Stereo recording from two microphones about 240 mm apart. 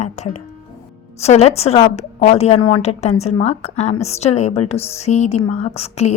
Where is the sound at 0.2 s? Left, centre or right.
Left.